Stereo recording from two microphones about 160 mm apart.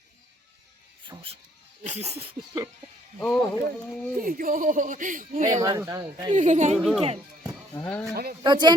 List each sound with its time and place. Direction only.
1.0 s speech: 30° right (ahead or behind)
1.9 s speech: 45° right (ahead or behind)
3.2 s speech: 5° left (ahead or behind)
4.2 s speech: 60° right (ahead or behind)
5.6 s speech: 20° right (ahead or behind)
6.3 s speech: 50° right (ahead or behind)
6.7 s speech: centre (ahead or behind)
7.8 s speech: 15° left (ahead or behind)
8.1 s a man's voice: 70° right (ahead or behind)
8.4 s speech: 30° right (ahead or behind)